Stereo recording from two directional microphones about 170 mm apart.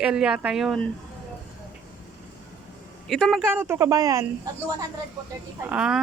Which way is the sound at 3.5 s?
15° right (ahead or behind).